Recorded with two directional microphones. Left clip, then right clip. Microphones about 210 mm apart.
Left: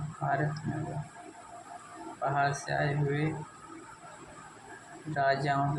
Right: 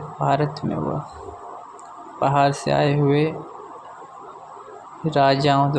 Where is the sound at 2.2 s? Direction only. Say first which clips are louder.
Right 11 dB; 30° right (ahead or behind).